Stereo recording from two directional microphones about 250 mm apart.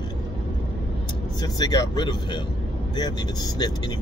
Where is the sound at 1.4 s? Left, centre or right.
Centre.